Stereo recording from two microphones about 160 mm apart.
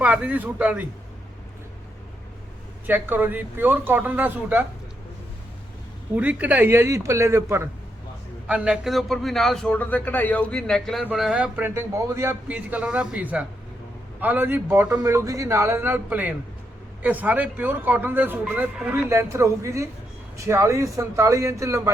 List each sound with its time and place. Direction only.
0.0 s speech: 10° right (ahead or behind)
2.8 s speech: 10° right (ahead or behind)
6.1 s a man's voice: 10° right (ahead or behind)